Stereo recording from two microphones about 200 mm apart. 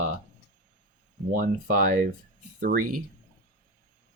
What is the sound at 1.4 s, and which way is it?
Speech, 40° right (ahead or behind).